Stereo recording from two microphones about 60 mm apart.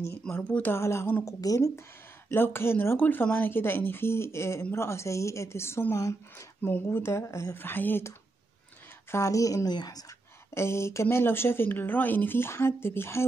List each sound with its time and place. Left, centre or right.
0.3 s speech: left
0.7 s speech: left
1.2 s speech: left
2.2 s speech: left
5.9 s a woman's voice: left
6.6 s speech: left
7.5 s speech: left
9.1 s speech: left
10.5 s speech: left